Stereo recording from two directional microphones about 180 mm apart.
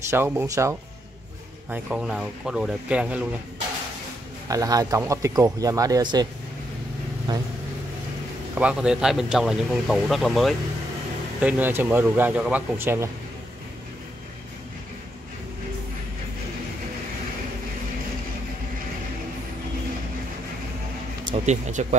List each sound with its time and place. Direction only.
0.1 s speech: 15° right (ahead or behind)
4.5 s speech: 20° right (ahead or behind)
7.3 s speech: 25° right (ahead or behind)
8.5 s speech: 5° right (ahead or behind)
21.5 s speech: 40° right (ahead or behind)